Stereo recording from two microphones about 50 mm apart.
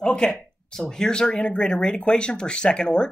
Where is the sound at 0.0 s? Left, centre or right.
Centre.